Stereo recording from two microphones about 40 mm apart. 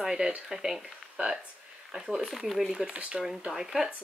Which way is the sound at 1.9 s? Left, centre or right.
Centre.